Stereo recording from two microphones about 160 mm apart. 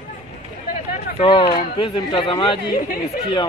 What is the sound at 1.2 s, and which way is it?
Speech, 35° left (ahead or behind).